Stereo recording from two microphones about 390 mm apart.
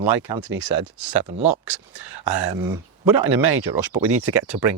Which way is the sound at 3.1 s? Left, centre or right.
Right.